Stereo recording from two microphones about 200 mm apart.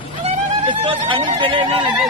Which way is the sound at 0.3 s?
25° right (ahead or behind).